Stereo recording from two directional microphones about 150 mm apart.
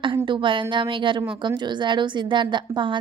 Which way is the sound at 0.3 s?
35° right (ahead or behind).